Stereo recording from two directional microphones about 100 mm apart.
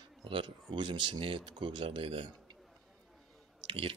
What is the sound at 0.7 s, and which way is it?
Speech, 50° right (ahead or behind).